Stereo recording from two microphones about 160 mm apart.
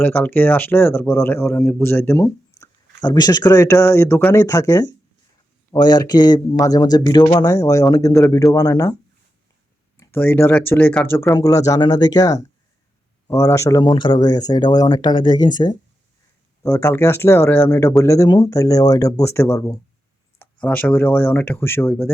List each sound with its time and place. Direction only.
0.0 s speech: 10° left (ahead or behind)
10.0 s speech: 10° left (ahead or behind)
16.6 s speech: 15° left (ahead or behind)